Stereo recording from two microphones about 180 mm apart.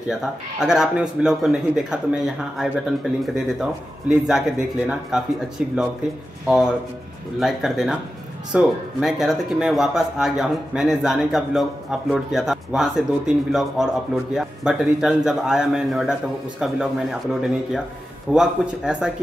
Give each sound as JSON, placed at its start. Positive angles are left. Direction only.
{"t": 0.1, "sound": "speech", "side_deg": -5}
{"t": 6.4, "sound": "speech", "side_deg": -5}